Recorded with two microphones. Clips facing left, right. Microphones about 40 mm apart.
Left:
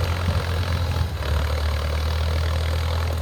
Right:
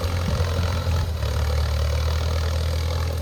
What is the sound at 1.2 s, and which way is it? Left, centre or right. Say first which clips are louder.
Vehicle: left 1 dB; left.